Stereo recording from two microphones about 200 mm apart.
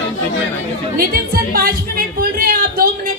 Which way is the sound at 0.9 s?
50° right (ahead or behind).